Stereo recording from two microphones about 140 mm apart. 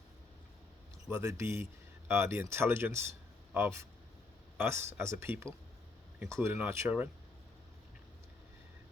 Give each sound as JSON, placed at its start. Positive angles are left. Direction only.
{"t": 1.4, "sound": "speech", "side_deg": -20}